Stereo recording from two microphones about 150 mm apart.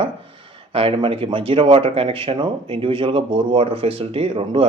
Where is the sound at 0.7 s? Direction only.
40° right (ahead or behind).